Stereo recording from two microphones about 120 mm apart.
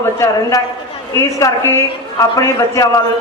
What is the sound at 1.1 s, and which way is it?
A man's voice, 25° left (ahead or behind).